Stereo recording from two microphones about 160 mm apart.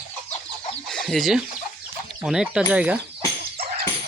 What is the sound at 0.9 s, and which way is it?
Speech, centre (ahead or behind).